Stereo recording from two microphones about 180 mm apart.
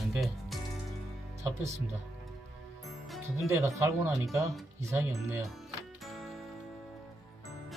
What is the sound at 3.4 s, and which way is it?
Speech, 15° right (ahead or behind).